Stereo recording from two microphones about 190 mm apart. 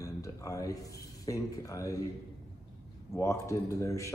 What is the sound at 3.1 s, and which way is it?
Speech, 15° left (ahead or behind).